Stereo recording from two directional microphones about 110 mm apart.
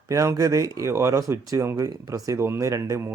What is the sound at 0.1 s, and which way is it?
A man's voice, 30° right (ahead or behind).